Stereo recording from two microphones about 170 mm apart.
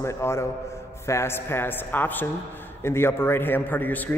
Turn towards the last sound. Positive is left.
turn(degrees=10)  # may be behind; listen again after turning